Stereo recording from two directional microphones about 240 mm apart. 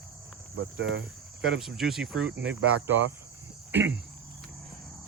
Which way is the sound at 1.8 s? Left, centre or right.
Centre.